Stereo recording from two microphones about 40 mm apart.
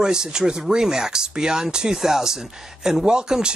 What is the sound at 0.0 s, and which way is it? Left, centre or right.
Speech, centre.